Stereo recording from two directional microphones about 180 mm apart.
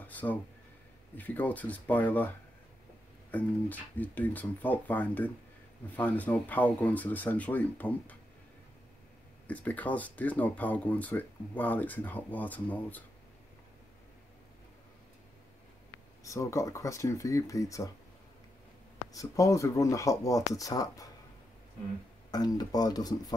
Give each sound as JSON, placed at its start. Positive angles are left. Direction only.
{"t": 0.0, "sound": "speech", "side_deg": 10}
{"t": 9.5, "sound": "speech", "side_deg": 10}
{"t": 16.3, "sound": "speech", "side_deg": 15}
{"t": 19.1, "sound": "speech", "side_deg": 20}
{"t": 22.3, "sound": "speech", "side_deg": 20}